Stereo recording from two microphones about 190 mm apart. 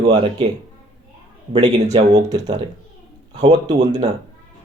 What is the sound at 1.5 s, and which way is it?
Speech, 35° right (ahead or behind).